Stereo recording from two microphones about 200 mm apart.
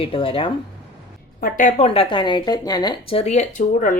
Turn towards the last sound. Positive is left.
turn(degrees=40)  # may be behind; listen again after turning